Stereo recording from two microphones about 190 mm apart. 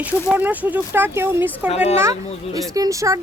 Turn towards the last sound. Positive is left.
turn(degrees=-15)  # may be behind; listen again after turning